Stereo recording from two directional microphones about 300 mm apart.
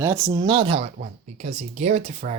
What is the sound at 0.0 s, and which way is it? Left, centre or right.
A man's voice, centre.